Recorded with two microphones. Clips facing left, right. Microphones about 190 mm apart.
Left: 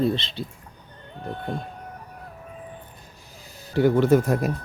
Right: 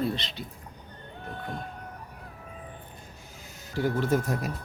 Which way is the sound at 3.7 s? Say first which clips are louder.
Left 8 dB; 70° left (ahead or behind).